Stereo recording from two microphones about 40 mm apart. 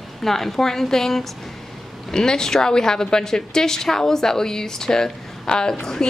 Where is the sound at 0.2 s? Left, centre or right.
Centre.